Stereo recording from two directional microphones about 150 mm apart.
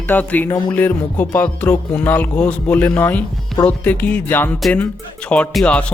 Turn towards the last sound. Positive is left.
turn(degrees=5)  # may be behind; listen again after turning